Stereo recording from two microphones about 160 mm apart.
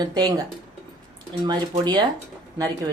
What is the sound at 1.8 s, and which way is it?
Speech, 25° right (ahead or behind).